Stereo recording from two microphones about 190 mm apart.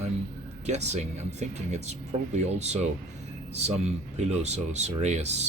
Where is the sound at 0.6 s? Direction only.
35° right (ahead or behind).